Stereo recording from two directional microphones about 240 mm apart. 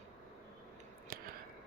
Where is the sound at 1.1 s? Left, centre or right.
Right.